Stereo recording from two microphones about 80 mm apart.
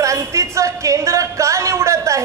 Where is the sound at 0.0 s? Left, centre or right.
Right.